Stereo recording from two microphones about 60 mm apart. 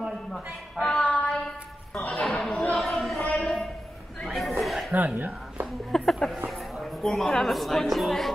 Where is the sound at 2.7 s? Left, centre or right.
Centre.